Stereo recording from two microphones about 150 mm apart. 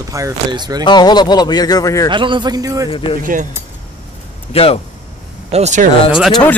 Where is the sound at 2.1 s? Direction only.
30° right (ahead or behind).